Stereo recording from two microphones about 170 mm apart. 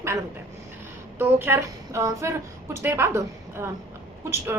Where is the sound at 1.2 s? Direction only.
10° right (ahead or behind).